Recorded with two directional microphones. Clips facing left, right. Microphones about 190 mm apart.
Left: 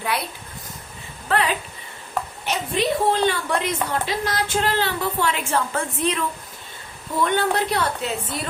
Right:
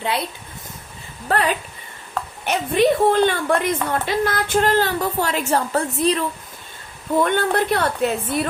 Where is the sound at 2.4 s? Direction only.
55° right (ahead or behind); by 6.3 s 35° right (ahead or behind).